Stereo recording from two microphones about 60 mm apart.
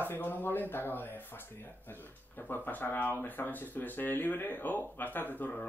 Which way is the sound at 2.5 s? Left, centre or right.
Left.